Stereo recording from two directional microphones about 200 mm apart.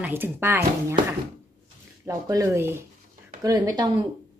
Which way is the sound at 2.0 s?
15° right (ahead or behind).